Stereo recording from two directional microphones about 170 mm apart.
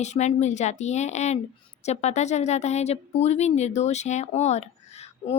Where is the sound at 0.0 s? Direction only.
45° left (ahead or behind).